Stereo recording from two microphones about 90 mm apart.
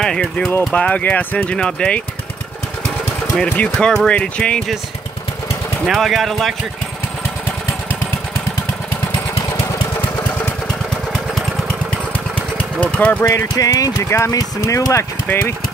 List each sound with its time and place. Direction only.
0.0 s speech: 5° left (ahead or behind)
3.5 s speech: 10° left (ahead or behind)
5.9 s speech: centre (ahead or behind)
12.8 s speech: 15° left (ahead or behind)
13.3 s speech: 35° left (ahead or behind)
15.3 s speech: 20° left (ahead or behind)